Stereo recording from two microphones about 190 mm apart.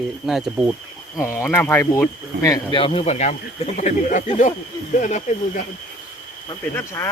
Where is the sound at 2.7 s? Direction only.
30° left (ahead or behind).